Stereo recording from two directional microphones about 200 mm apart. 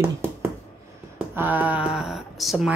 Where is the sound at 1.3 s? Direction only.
10° right (ahead or behind).